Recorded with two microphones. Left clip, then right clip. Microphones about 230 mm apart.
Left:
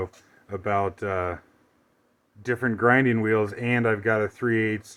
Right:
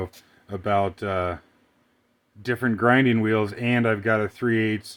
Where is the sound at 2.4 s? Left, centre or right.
Right.